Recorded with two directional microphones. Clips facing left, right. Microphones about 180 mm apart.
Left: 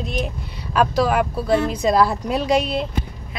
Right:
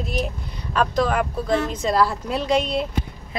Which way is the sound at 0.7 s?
10° left (ahead or behind).